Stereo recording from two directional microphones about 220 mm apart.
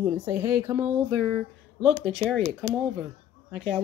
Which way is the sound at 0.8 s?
Centre (ahead or behind).